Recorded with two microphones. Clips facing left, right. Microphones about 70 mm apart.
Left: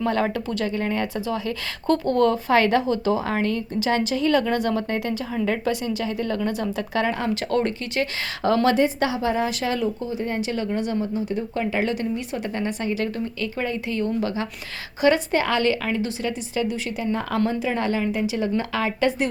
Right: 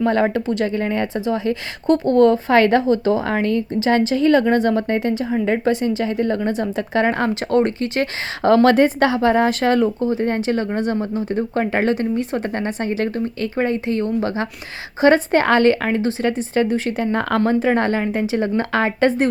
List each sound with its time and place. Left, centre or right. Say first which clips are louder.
0.0 s speech: right 5 dB; right
8.4 s speech: right 6 dB; right
17.4 s speech: right 7 dB; right